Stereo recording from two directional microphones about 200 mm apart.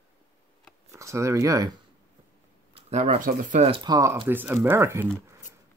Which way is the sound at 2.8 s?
35° right (ahead or behind).